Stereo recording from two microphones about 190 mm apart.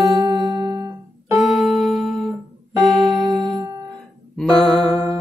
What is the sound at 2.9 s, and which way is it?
Music, centre (ahead or behind).